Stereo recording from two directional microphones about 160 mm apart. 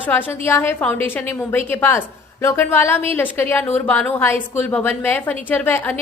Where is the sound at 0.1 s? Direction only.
10° left (ahead or behind).